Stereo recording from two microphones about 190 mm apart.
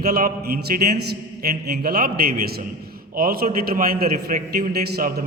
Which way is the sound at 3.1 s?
50° right (ahead or behind).